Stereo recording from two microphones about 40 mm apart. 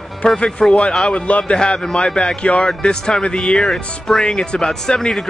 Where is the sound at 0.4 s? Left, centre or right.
Left.